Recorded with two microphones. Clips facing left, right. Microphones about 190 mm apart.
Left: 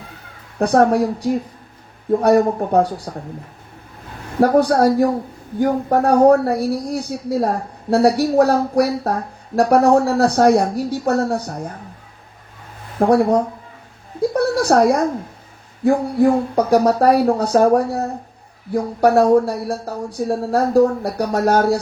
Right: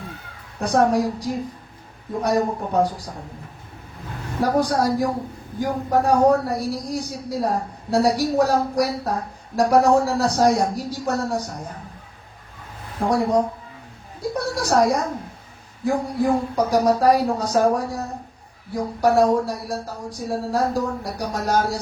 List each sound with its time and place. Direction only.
0.6 s a woman's voice: 60° left (ahead or behind)
4.4 s a woman's voice: 60° left (ahead or behind)
6.1 s a woman's voice: 60° left (ahead or behind)
13.0 s a woman's voice: 55° left (ahead or behind)
14.3 s a woman's voice: 60° left (ahead or behind)